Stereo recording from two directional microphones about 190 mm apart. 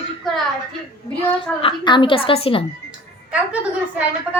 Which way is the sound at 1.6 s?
25° left (ahead or behind).